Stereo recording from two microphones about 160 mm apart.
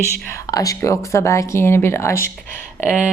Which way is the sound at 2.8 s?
50° right (ahead or behind).